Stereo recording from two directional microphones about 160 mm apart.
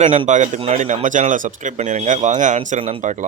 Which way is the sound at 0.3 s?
50° right (ahead or behind).